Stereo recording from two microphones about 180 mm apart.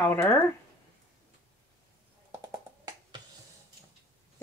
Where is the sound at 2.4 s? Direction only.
20° right (ahead or behind).